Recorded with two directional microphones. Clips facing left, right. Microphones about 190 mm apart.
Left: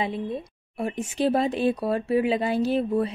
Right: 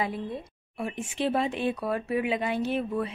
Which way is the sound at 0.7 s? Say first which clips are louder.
Left 4 dB; 40° left (ahead or behind).